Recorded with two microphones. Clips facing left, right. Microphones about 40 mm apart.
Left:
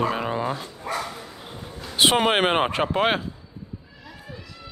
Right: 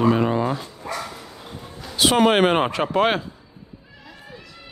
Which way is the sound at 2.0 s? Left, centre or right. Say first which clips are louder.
Right 2 dB; left.